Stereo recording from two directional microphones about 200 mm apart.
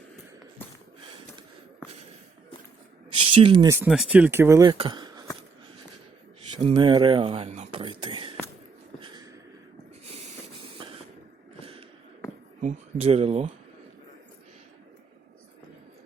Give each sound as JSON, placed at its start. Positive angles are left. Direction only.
{"t": 3.1, "sound": "a sound", "side_deg": -25}
{"t": 3.8, "sound": "speech", "side_deg": -5}
{"t": 6.6, "sound": "speech", "side_deg": -25}
{"t": 9.0, "sound": "a sound", "side_deg": -20}
{"t": 10.1, "sound": "train", "side_deg": -30}
{"t": 12.6, "sound": "speech", "side_deg": -30}